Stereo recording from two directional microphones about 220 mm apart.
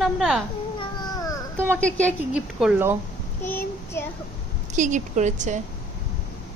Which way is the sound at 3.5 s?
10° left (ahead or behind).